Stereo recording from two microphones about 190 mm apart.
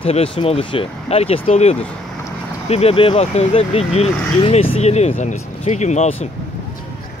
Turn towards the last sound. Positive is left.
turn(degrees=35)  # may be behind; listen again after turning